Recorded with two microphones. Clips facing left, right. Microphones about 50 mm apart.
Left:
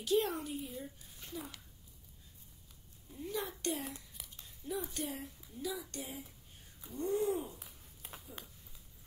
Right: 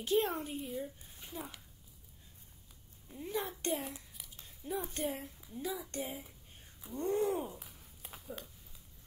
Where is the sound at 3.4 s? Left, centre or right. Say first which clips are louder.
Right 2 dB; right.